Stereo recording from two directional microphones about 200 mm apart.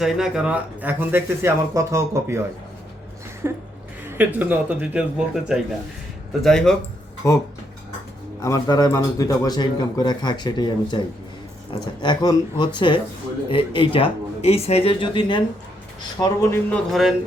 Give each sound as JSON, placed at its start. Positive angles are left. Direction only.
{"t": 0.0, "sound": "speech", "side_deg": -5}
{"t": 3.4, "sound": "speech", "side_deg": -10}
{"t": 7.2, "sound": "a man's voice", "side_deg": 15}
{"t": 16.9, "sound": "speech", "side_deg": 0}